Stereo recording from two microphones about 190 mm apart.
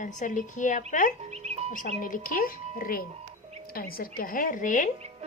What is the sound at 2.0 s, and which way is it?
A woman's voice, 45° left (ahead or behind).